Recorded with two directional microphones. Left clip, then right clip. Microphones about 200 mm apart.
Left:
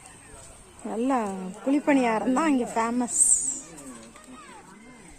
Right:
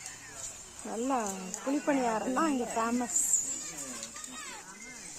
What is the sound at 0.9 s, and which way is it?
Speech, 20° left (ahead or behind).